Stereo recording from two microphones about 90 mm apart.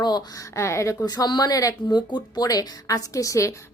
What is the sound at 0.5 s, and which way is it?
Speech, 30° left (ahead or behind).